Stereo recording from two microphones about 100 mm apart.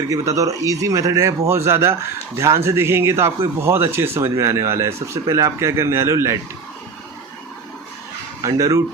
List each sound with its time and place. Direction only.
0.1 s speech: 35° right (ahead or behind)
8.4 s speech: 30° right (ahead or behind)